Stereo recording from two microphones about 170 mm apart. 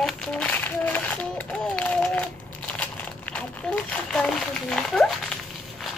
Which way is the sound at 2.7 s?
5° left (ahead or behind).